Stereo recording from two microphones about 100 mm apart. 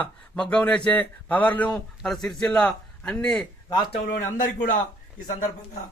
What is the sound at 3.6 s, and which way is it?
Speech, 45° left (ahead or behind).